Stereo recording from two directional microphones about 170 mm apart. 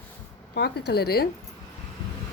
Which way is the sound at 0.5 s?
75° left (ahead or behind).